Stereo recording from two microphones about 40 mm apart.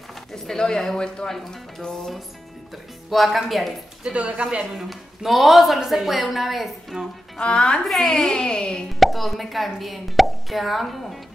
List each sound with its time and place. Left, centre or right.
0.6 s speech: centre
1.3 s speech: centre
2.7 s speech: centre
4.0 s speech: right
4.7 s speech: centre
7.3 s a child's voice: left
7.8 s speech: centre
8.1 s a child's voice: centre
9.0 s speech: centre